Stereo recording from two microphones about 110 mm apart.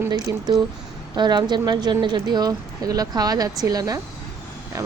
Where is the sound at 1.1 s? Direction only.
40° right (ahead or behind).